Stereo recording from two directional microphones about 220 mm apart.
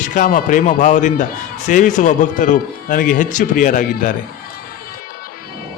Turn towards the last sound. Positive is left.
turn(degrees=35)  # may be behind; listen again after turning